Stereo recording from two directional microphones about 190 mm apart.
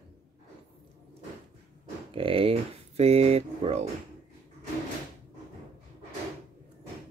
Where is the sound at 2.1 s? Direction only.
30° right (ahead or behind).